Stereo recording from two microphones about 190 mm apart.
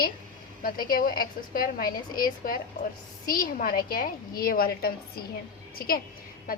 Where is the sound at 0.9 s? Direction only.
50° left (ahead or behind).